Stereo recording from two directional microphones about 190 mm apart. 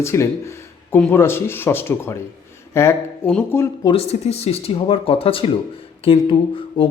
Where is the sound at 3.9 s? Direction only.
30° left (ahead or behind).